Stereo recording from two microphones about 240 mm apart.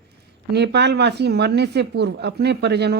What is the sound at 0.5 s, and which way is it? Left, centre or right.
Speech, right.